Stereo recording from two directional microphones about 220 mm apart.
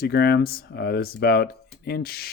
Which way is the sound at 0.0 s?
45° left (ahead or behind).